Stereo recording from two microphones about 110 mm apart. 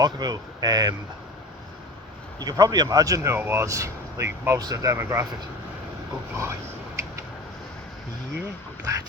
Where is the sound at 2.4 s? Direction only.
35° right (ahead or behind).